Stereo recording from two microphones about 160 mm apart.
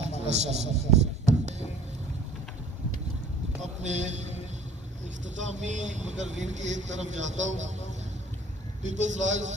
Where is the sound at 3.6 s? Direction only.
45° right (ahead or behind).